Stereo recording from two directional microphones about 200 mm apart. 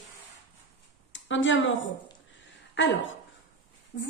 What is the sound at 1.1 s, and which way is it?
A woman's voice, 70° left (ahead or behind).